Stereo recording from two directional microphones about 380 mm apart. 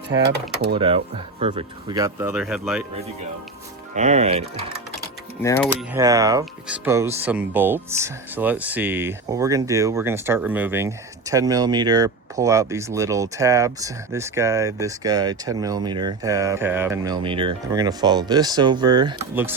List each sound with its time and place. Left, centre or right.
0.7 s speech: centre
3.9 s speech: centre
5.4 s speech: centre